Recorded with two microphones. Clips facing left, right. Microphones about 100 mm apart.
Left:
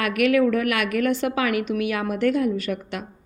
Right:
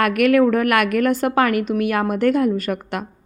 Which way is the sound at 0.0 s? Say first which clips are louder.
Right 4 dB; 50° right (ahead or behind).